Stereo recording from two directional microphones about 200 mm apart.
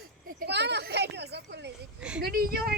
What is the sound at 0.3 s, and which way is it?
Speech, 50° right (ahead or behind).